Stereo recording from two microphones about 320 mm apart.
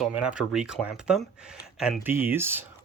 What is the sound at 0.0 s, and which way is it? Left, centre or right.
Speech, centre.